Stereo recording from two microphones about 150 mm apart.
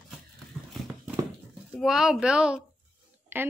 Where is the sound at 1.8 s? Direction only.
5° right (ahead or behind).